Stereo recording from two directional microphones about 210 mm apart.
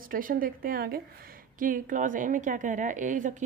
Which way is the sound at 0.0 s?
40° right (ahead or behind).